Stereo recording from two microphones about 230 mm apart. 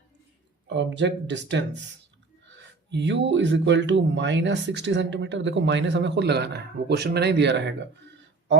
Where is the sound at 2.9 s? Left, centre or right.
Right.